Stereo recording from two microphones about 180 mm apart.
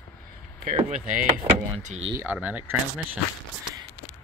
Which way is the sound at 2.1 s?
10° right (ahead or behind).